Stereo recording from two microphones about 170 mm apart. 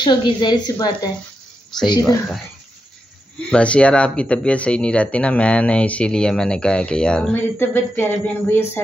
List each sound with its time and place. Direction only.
0.0 s speech: 25° left (ahead or behind)
3.3 s speech: 5° left (ahead or behind)